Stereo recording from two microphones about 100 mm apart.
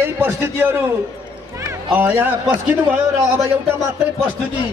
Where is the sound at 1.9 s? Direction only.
20° right (ahead or behind).